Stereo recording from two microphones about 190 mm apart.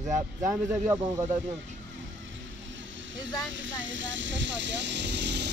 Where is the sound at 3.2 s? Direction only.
80° right.